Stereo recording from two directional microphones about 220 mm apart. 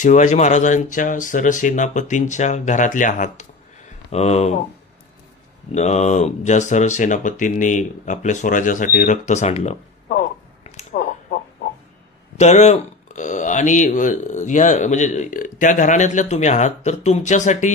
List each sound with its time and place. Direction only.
0.0 s speech: 35° left (ahead or behind)
5.7 s speech: 30° left (ahead or behind)
10.6 s a sound: 30° left (ahead or behind)
12.4 s speech: 30° left (ahead or behind)